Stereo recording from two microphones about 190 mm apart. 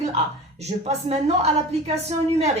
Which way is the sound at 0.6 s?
35° right (ahead or behind).